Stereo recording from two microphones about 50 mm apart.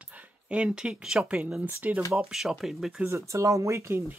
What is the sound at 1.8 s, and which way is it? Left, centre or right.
Speech, right.